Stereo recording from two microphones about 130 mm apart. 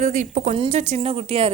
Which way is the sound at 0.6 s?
55° right (ahead or behind).